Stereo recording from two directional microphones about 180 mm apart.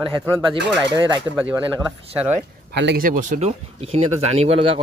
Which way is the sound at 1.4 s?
10° right (ahead or behind).